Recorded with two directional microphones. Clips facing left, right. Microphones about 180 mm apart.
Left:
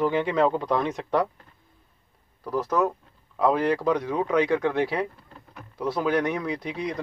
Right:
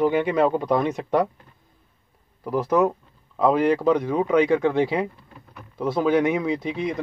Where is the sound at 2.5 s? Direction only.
10° right (ahead or behind).